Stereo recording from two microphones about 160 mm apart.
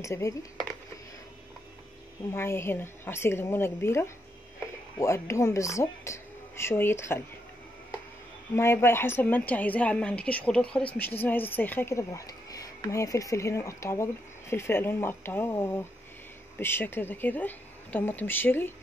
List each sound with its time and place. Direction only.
0.0 s speech: 20° left (ahead or behind)
2.3 s a woman's voice: 15° left (ahead or behind)
8.5 s a woman's voice: 15° left (ahead or behind)